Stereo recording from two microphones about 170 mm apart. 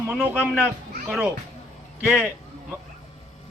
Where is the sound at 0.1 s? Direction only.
10° right (ahead or behind).